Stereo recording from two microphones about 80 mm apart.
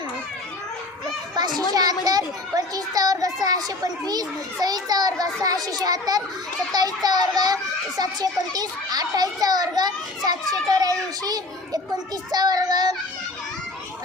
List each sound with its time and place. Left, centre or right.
1.4 s children playing: right
1.7 s a child's voice: right